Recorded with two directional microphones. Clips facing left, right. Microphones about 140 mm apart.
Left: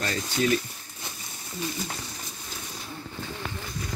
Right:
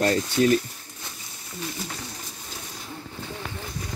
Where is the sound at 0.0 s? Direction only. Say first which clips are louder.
Right 6 dB; 45° right (ahead or behind).